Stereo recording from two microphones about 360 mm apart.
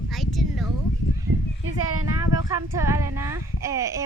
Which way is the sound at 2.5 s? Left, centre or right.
Centre.